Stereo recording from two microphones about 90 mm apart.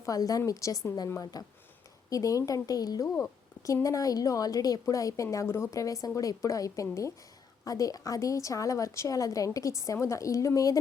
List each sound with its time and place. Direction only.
0.0 s a woman's voice: 40° left (ahead or behind)